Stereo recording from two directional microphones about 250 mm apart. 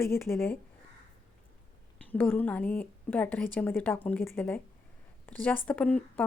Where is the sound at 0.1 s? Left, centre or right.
Centre.